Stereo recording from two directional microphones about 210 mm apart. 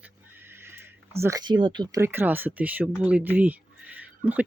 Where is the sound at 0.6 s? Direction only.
10° right (ahead or behind).